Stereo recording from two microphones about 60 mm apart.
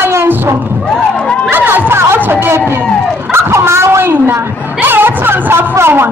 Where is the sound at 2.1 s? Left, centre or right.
Right.